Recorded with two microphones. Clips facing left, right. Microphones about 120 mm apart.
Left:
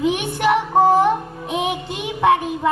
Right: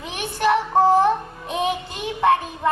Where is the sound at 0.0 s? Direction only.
15° left (ahead or behind).